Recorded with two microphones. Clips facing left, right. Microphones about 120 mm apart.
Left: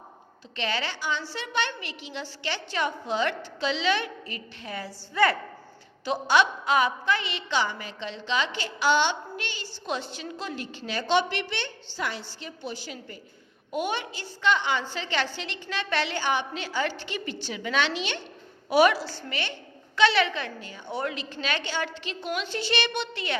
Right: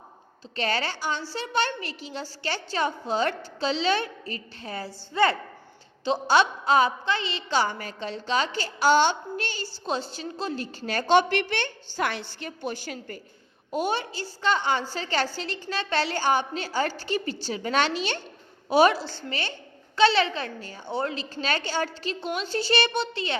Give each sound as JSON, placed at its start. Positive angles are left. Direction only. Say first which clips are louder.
{"t": 0.5, "sound": "a woman's voice", "louder": "right 3 dB", "side_deg": -40}
{"t": 13.7, "sound": "a woman's voice", "louder": "right 2 dB", "side_deg": -35}
{"t": 18.7, "sound": "a woman's voice", "louder": "right 1 dB", "side_deg": -30}